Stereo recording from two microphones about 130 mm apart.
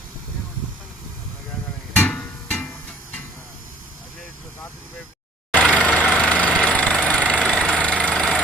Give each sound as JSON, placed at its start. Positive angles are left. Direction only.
{"t": 2.0, "sound": "music", "side_deg": 10}
{"t": 5.5, "sound": "vehicle", "side_deg": 10}